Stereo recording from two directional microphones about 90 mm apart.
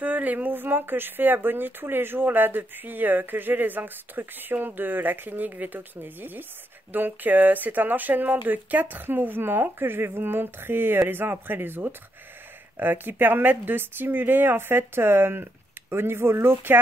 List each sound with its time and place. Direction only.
0.0 s speech: 20° right (ahead or behind)